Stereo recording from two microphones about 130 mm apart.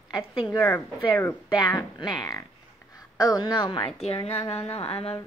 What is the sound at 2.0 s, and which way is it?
Frog, 30° left (ahead or behind).